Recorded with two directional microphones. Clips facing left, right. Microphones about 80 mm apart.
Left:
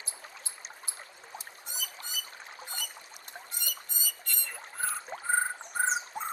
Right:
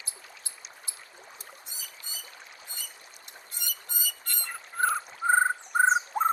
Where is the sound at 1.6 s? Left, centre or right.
Left.